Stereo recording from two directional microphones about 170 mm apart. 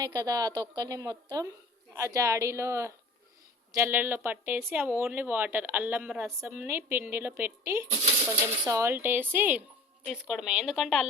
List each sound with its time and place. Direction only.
0.0 s a woman's voice: 20° right (ahead or behind); by 11.1 s centre (ahead or behind)